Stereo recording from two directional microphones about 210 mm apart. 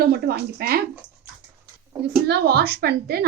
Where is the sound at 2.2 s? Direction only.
50° right (ahead or behind).